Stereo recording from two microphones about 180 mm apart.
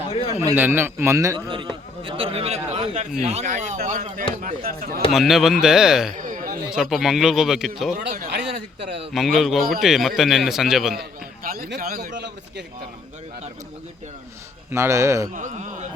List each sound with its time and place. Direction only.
0.1 s a sound: 35° left (ahead or behind)
0.3 s a man's voice: 10° right (ahead or behind); by 5.0 s 55° right (ahead or behind)
5.1 s speech: centre (ahead or behind)
6.1 s a sound: 45° right (ahead or behind)
6.7 s speech: centre (ahead or behind)
8.4 s a sound: 30° right (ahead or behind)
9.1 s speech: centre (ahead or behind)
11.4 s a man's voice: 55° right (ahead or behind)
14.7 s a man's voice: 15° right (ahead or behind)
15.3 s speech: 45° right (ahead or behind)